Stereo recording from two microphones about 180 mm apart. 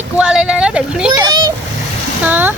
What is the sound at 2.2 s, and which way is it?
Speech, 10° right (ahead or behind).